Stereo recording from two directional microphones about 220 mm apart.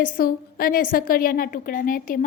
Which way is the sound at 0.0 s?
40° left (ahead or behind).